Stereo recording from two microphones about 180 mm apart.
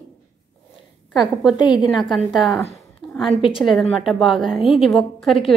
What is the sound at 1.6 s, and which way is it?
Speech, 25° left (ahead or behind).